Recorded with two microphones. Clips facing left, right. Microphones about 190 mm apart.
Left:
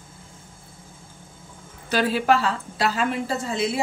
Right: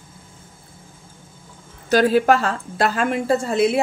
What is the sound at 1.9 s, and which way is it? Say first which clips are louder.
A woman's voice: right 5 dB; 45° right (ahead or behind).